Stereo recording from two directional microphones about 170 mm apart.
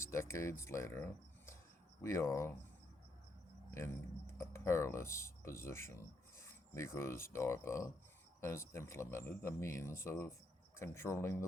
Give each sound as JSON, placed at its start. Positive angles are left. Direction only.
{"t": 0.0, "sound": "speech", "side_deg": 15}
{"t": 4.4, "sound": "speech", "side_deg": 15}